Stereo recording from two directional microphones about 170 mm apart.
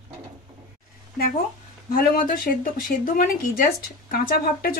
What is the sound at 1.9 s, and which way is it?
Speech, 55° left (ahead or behind).